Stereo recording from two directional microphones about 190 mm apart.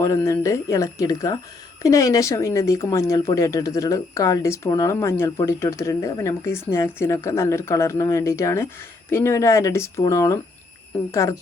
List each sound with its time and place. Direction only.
0.0 s speech: 15° left (ahead or behind)